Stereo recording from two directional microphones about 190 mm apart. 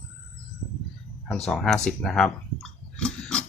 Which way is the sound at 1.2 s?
Centre (ahead or behind).